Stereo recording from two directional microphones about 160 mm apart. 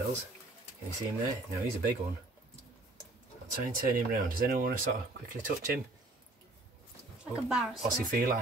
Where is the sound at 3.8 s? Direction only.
60° right (ahead or behind).